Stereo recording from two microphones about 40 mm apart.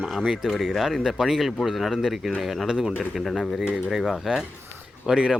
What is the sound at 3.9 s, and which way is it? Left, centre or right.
Speech, centre.